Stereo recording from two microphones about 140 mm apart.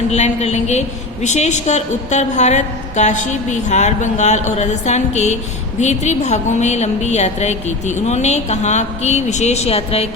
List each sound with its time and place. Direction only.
0.1 s a woman's voice: 50° left (ahead or behind)